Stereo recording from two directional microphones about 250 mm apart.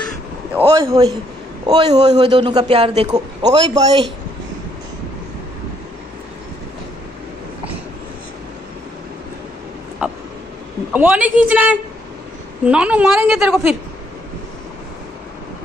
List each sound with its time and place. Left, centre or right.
0.6 s a man's voice: centre
10.0 s a sound: centre
10.9 s a woman's voice: centre